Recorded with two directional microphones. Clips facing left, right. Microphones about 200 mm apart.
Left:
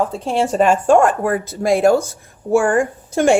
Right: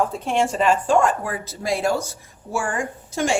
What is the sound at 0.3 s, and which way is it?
A woman's voice, 40° left (ahead or behind).